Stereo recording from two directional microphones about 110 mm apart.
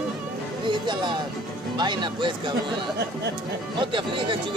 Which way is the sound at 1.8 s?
45° right (ahead or behind).